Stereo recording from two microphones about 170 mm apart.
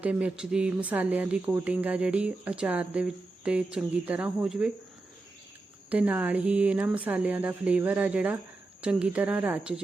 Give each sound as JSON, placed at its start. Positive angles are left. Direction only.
{"t": 0.0, "sound": "speech", "side_deg": -5}
{"t": 5.9, "sound": "speech", "side_deg": -10}